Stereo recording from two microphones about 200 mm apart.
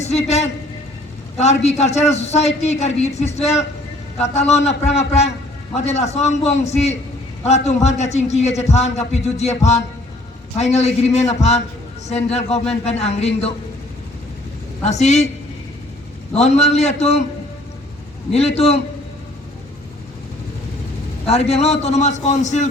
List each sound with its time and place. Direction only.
0.0 s a man's voice: 35° left (ahead or behind)
14.8 s a man's voice: 35° left (ahead or behind)
16.3 s a man's voice: 35° left (ahead or behind)
18.3 s a man's voice: 30° left (ahead or behind)
21.2 s a man's voice: 30° left (ahead or behind)